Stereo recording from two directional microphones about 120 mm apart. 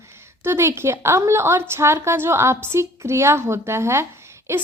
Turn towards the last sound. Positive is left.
turn(degrees=-25)  # may be behind; listen again after turning